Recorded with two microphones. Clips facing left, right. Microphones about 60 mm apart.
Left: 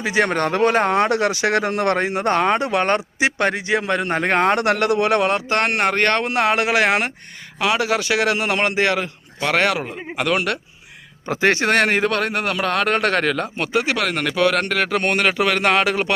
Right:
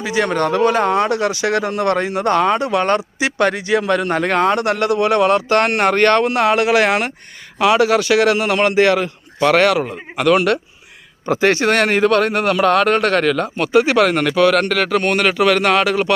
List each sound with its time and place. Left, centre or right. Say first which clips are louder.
0.0 s a man's voice: right 1 dB; left
4.5 s speech: right 1 dB; left
5.5 s a man's voice: right 4 dB; centre
6.2 s a man's voice: right 4 dB; centre
7.6 s speech: right 6 dB; centre
7.9 s a man's voice: right 5 dB; centre
11.3 s a man's voice: right 3 dB; centre
12.1 s a man's voice: right 6 dB; centre
13.0 s a man's voice: right 4 dB; centre
13.7 s speech: right 8 dB; centre
14.3 s a man's voice: right 3 dB; centre
15.7 s a man's voice: right 3 dB; left